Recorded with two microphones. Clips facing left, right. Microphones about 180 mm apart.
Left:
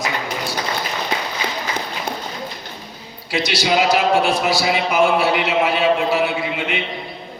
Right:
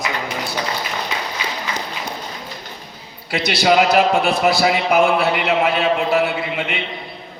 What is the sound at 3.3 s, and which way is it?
A man's voice, 55° right (ahead or behind).